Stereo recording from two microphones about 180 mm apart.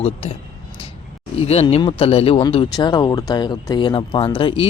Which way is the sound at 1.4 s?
35° left (ahead or behind).